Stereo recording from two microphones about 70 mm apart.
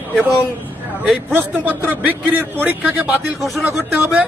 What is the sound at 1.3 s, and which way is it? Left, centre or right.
A man's voice, right.